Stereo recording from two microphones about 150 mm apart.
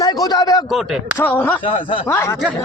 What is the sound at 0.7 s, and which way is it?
Speech, 5° right (ahead or behind).